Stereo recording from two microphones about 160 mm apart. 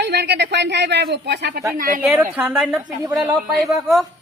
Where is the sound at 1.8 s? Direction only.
60° right (ahead or behind).